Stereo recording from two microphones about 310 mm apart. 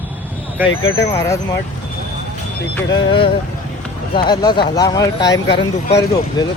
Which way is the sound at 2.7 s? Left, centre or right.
Centre.